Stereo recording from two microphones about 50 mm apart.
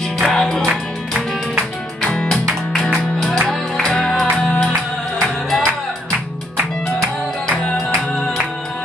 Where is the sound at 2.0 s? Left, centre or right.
Centre.